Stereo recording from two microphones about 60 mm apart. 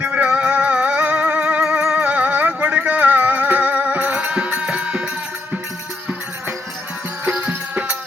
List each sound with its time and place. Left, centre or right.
0.0 s music: right
7.3 s music: right